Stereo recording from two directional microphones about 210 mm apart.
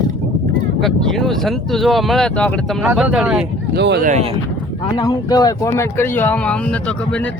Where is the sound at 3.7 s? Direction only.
55° right (ahead or behind).